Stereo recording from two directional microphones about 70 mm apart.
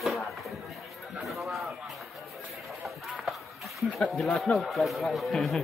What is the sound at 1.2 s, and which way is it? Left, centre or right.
Speech, centre.